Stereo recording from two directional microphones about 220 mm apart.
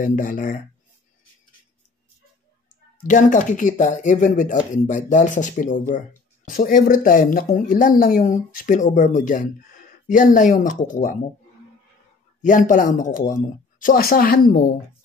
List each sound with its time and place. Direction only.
0.0 s speech: 35° left (ahead or behind)
3.0 s speech: 35° left (ahead or behind)
12.4 s speech: 35° left (ahead or behind)